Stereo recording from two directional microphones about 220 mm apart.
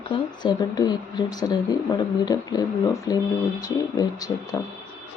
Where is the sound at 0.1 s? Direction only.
20° left (ahead or behind).